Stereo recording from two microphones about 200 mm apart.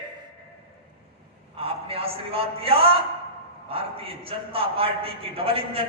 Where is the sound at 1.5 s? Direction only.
30° right (ahead or behind).